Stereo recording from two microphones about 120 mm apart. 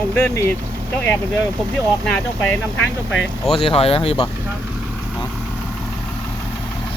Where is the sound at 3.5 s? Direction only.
55° left (ahead or behind).